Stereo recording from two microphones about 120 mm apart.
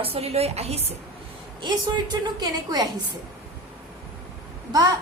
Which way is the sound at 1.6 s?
40° right (ahead or behind).